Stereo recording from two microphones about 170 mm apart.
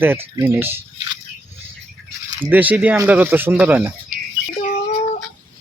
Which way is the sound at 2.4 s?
10° right (ahead or behind).